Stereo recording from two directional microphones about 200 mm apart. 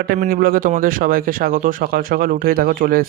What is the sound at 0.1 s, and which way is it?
Speech, 45° right (ahead or behind).